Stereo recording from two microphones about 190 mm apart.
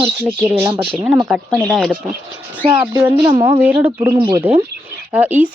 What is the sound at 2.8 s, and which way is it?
Speech, 15° right (ahead or behind).